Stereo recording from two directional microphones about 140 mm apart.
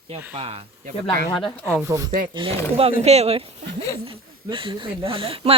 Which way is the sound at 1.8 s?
20° right (ahead or behind).